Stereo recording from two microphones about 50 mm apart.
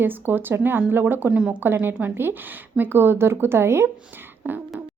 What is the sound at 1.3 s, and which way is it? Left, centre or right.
Speech, right.